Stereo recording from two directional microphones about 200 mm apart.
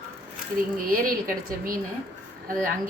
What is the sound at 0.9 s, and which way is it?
Speech, 45° right (ahead or behind).